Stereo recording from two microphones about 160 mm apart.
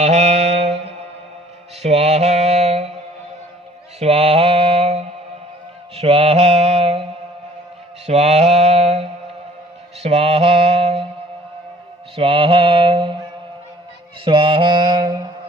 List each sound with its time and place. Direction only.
0.0 s music: 45° right (ahead or behind)
1.8 s mantra: 40° right (ahead or behind)
4.0 s mantra: 40° right (ahead or behind)
12.1 s mantra: 35° right (ahead or behind)
14.3 s mantra: 35° right (ahead or behind)